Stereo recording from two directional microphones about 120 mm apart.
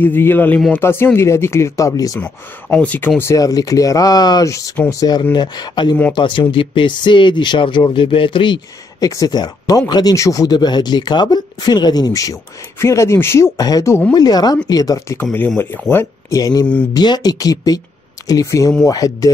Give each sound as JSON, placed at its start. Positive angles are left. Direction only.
{"t": 0.0, "sound": "speech", "side_deg": 15}
{"t": 2.1, "sound": "speech", "side_deg": 10}
{"t": 3.2, "sound": "speech", "side_deg": 25}
{"t": 9.0, "sound": "speech", "side_deg": 30}
{"t": 15.3, "sound": "speech", "side_deg": 15}